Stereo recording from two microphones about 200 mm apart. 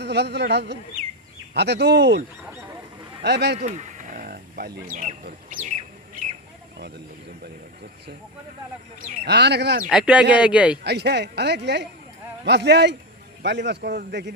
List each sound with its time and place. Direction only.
0.0 s speech: 55° right (ahead or behind)
3.2 s speech: 60° right (ahead or behind)
3.6 s speech: 35° right (ahead or behind)
9.0 s speech: 50° right (ahead or behind)
9.9 s a man's voice: 5° right (ahead or behind)
10.8 s speech: 55° right (ahead or behind)